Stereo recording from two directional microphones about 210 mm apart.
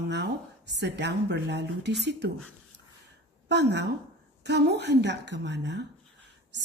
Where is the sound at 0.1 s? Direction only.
55° right (ahead or behind).